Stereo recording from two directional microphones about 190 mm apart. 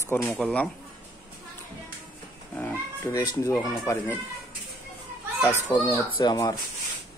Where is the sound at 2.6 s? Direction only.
15° left (ahead or behind).